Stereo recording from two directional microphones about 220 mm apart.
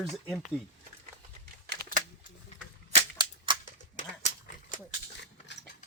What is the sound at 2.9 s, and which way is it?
Cap gun, 20° right (ahead or behind).